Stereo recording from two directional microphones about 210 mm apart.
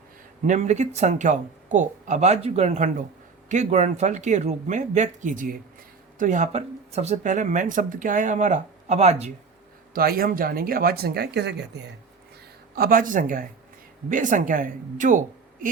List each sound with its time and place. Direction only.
0.4 s speech: 35° right (ahead or behind)
9.9 s speech: 45° right (ahead or behind)